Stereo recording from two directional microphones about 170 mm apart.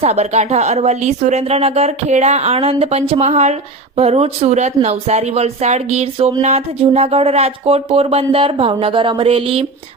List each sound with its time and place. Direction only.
0.0 s speech: 40° right (ahead or behind)